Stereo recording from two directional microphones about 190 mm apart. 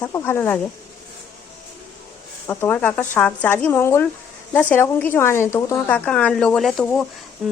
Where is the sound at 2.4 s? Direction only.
10° left (ahead or behind).